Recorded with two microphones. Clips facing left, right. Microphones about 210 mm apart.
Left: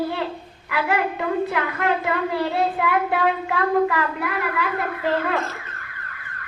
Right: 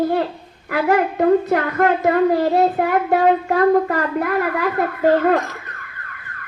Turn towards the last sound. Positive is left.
turn(degrees=-45)  # may be behind; listen again after turning